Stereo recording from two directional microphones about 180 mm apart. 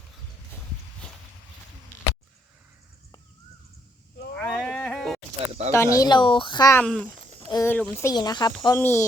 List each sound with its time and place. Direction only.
4.4 s sheep: 5° left (ahead or behind)
5.7 s a woman's voice: 15° left (ahead or behind)
6.7 s speech: 5° left (ahead or behind)
8.0 s a woman's voice: 20° left (ahead or behind)
8.8 s speech: 10° left (ahead or behind)